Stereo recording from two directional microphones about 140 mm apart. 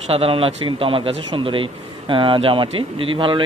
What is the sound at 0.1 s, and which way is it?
A man's voice, 45° right (ahead or behind).